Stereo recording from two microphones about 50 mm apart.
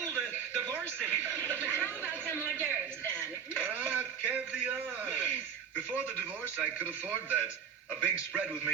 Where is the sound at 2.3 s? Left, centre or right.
Right.